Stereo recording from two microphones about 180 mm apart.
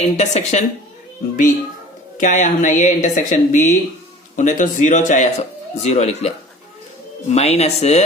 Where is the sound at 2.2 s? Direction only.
45° left (ahead or behind).